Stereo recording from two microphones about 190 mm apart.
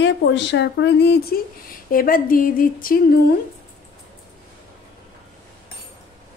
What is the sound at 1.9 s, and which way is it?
A woman's voice, 45° left (ahead or behind).